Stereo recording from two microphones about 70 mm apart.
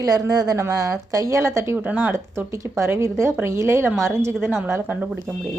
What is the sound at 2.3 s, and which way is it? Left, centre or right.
Speech, right.